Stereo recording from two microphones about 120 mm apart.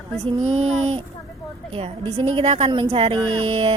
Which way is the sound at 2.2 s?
45° right (ahead or behind).